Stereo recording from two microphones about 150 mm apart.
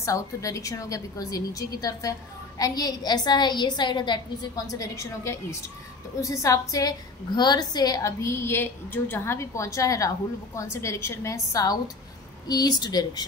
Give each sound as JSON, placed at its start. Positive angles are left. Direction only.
{"t": 0.0, "sound": "a woman's voice", "side_deg": 20}